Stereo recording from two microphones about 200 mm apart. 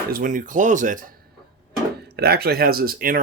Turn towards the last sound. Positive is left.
turn(degrees=-45)  # may be behind; listen again after turning